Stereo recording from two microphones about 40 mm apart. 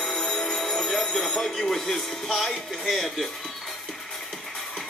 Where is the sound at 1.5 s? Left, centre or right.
Centre.